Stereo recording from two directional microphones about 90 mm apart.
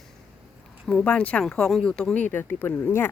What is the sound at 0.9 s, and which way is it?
A woman's voice, 10° left (ahead or behind).